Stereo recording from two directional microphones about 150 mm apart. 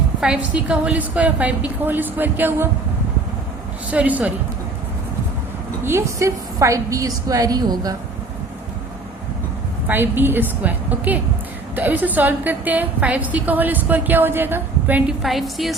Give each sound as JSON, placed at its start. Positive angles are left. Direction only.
{"t": 0.2, "sound": "a woman's voice", "side_deg": -5}
{"t": 3.9, "sound": "a woman's voice", "side_deg": -10}
{"t": 5.8, "sound": "a woman's voice", "side_deg": -15}
{"t": 9.8, "sound": "a woman's voice", "side_deg": -15}
{"t": 15.2, "sound": "a woman's voice", "side_deg": 0}